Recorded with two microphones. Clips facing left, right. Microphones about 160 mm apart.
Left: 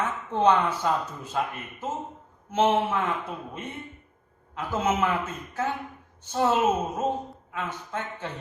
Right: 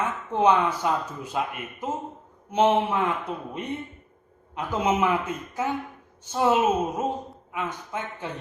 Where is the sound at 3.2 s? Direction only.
20° right (ahead or behind).